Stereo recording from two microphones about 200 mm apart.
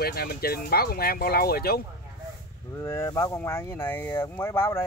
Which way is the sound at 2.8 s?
15° left (ahead or behind).